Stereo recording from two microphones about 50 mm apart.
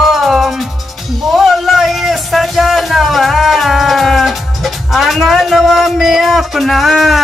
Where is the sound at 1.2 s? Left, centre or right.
Centre.